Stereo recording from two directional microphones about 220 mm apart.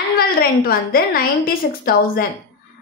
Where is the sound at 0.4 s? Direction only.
45° left (ahead or behind).